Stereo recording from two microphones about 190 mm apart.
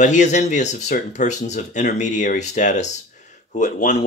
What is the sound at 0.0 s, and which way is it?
Speech, 40° left (ahead or behind).